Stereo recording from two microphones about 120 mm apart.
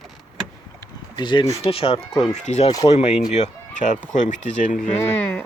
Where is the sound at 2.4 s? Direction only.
70° left (ahead or behind); by 4.7 s 90° left.